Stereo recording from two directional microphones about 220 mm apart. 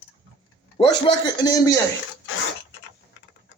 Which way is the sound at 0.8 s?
20° left (ahead or behind).